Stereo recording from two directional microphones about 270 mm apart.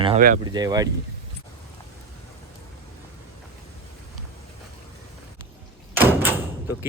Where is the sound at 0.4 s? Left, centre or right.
Centre.